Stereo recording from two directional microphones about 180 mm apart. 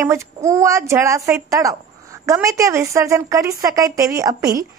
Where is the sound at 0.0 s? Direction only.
15° right (ahead or behind).